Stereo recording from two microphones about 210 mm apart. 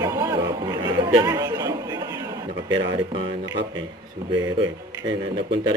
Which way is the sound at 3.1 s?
20° right (ahead or behind).